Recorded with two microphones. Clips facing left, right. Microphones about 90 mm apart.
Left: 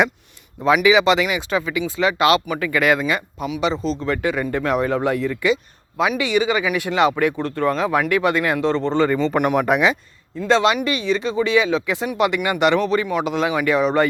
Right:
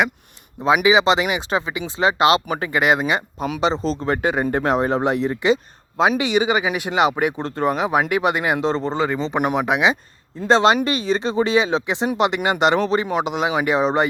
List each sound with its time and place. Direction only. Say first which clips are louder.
0.6 s speech: left 1 dB; 20° right (ahead or behind)
8.8 s speech: left 3 dB; 5° right (ahead or behind)
9.1 s speech: left 3 dB; 20° right (ahead or behind)
9.6 s speech: left 2 dB; 5° right (ahead or behind)
10.4 s speech: right 2 dB; 30° right (ahead or behind)